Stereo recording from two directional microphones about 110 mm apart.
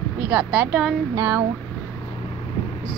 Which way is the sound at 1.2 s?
25° right (ahead or behind).